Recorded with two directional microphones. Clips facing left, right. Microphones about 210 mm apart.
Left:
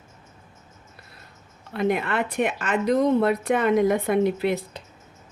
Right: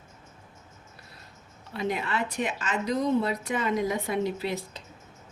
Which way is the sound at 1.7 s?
55° left (ahead or behind).